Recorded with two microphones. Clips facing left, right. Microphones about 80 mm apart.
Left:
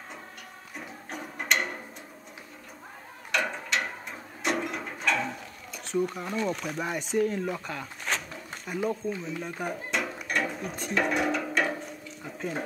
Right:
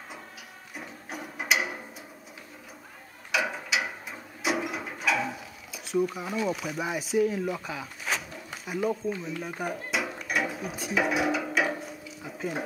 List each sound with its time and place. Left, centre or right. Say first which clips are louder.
0.7 s a sound: even; centre
3.3 s mechanisms: even; centre
7.5 s speech: even; centre
9.8 s drawer open or close: left 1 dB; centre
10.2 s mechanisms: even; centre